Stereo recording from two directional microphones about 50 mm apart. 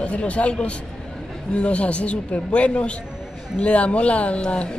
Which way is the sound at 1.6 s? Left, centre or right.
Left.